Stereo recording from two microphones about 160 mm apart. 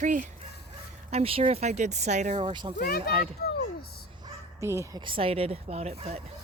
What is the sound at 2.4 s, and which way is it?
Speech, 30° right (ahead or behind).